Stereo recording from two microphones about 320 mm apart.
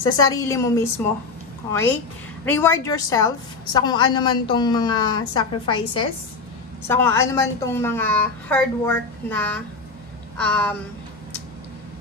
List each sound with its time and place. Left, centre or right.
0.0 s a woman's voice: centre